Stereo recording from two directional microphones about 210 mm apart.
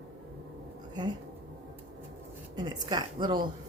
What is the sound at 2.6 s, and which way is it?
Speech, 20° right (ahead or behind).